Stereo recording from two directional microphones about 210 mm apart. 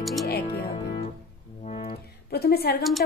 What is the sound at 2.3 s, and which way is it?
Speech, 50° left (ahead or behind).